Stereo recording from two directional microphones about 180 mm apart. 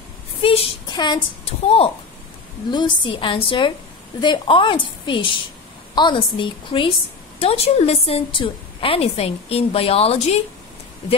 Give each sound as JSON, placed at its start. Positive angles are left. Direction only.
{"t": 0.4, "sound": "a woman's voice", "side_deg": 30}